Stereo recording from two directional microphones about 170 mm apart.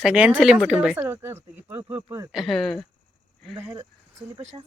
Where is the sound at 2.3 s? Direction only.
Centre (ahead or behind).